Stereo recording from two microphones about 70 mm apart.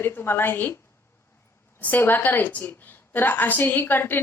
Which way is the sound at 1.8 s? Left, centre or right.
Left.